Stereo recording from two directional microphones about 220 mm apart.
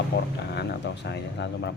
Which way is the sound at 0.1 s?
50° left (ahead or behind).